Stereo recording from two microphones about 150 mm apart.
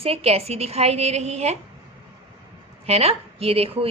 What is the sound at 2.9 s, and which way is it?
A woman's voice, 40° right (ahead or behind).